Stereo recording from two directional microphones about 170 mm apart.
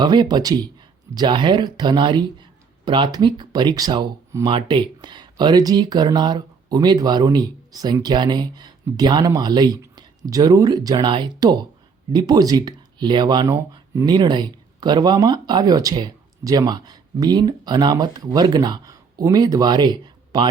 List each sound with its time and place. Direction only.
0.0 s speech: 25° right (ahead or behind)